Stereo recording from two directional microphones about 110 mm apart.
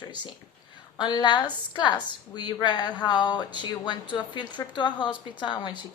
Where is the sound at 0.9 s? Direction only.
40° left (ahead or behind).